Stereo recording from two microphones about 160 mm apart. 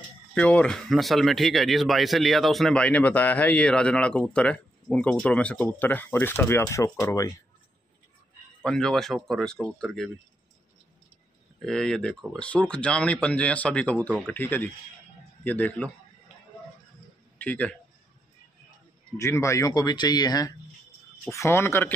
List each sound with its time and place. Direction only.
0.3 s speech: 5° left (ahead or behind)
8.6 s speech: 5° left (ahead or behind)
11.6 s speech: 5° left (ahead or behind)
17.4 s a man's voice: 10° left (ahead or behind)
19.1 s speech: 15° left (ahead or behind)